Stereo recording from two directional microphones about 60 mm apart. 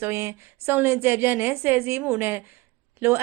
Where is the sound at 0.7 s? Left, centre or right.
Right.